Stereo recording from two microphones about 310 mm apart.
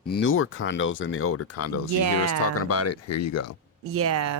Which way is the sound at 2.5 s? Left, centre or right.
Left.